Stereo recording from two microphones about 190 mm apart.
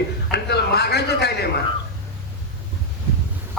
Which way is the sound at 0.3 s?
60° left (ahead or behind).